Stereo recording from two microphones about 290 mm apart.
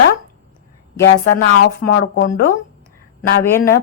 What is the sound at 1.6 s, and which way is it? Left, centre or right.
Speech, left.